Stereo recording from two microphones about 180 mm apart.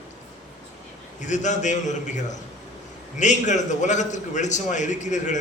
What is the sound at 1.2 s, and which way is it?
A man's voice, 40° left (ahead or behind).